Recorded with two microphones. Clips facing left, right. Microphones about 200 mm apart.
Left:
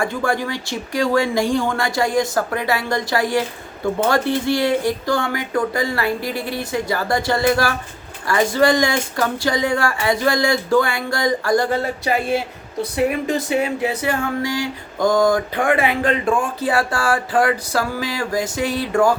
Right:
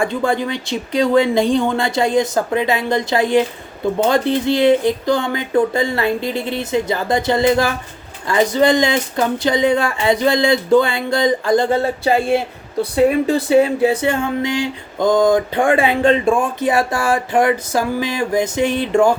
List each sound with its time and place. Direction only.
0.0 s speech: 20° right (ahead or behind)